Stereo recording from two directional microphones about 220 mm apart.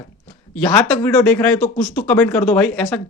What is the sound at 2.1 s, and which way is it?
Speech, 10° left (ahead or behind).